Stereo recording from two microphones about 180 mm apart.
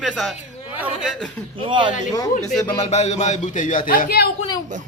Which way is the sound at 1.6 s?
25° right (ahead or behind).